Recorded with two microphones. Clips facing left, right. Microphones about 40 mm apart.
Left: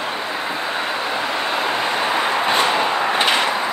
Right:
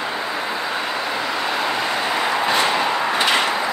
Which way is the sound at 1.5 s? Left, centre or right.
Left.